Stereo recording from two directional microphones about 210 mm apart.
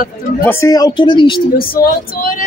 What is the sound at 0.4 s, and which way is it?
Speech, 10° left (ahead or behind).